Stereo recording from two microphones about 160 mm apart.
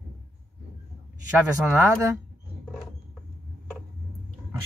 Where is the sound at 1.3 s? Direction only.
15° right (ahead or behind).